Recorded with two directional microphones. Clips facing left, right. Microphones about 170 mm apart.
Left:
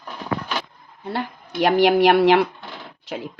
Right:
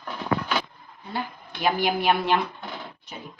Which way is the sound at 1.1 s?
75° left (ahead or behind).